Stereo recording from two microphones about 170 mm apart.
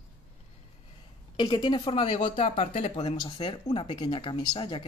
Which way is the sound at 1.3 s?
25° left (ahead or behind).